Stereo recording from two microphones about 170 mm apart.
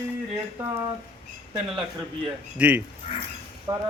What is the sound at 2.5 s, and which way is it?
Speech, 10° right (ahead or behind).